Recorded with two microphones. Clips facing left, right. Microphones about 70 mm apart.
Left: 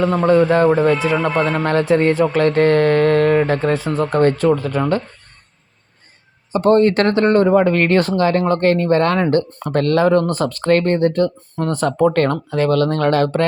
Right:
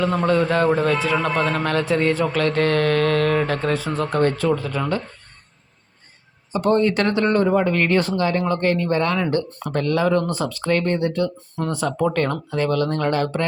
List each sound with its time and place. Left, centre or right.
0.0 s a man's voice: left
4.1 s speech: left
6.5 s speech: left
7.6 s speech: left